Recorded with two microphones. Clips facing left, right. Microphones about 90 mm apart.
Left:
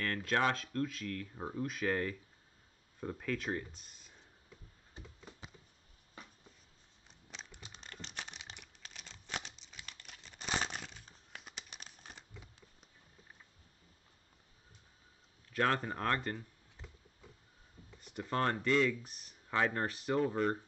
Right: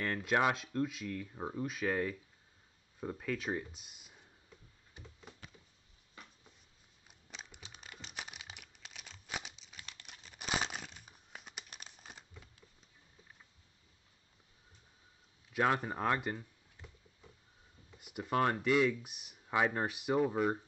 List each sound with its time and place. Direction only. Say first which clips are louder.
0.0 s speech: right 1 dB; 15° right (ahead or behind)
5.0 s a sound: left 2 dB; 35° left (ahead or behind)
7.1 s crumpling: even; 5° right (ahead or behind)
15.5 s speech: right 1 dB; 10° right (ahead or behind)
18.0 s speech: right 2 dB; 10° right (ahead or behind)